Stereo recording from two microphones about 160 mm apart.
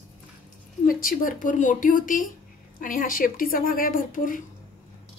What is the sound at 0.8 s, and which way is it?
Speech, 60° left (ahead or behind).